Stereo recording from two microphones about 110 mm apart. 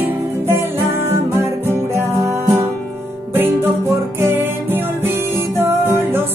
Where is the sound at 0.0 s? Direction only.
20° right (ahead or behind).